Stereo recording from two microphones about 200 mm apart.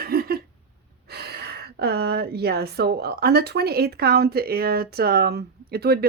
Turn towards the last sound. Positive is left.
turn(degrees=-50)  # may be behind; listen again after turning